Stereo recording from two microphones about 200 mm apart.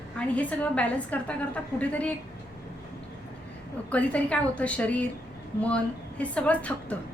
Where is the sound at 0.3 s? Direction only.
5° left (ahead or behind).